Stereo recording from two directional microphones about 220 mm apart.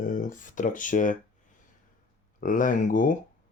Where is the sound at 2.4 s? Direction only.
35° left (ahead or behind).